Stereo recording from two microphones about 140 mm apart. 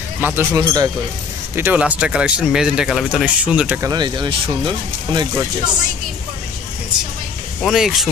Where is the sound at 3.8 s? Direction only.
30° right (ahead or behind).